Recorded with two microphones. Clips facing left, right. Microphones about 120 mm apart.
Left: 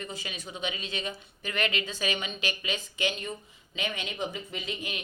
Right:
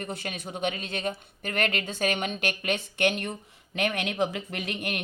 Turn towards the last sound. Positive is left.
turn(degrees=-65)  # may be behind; listen again after turning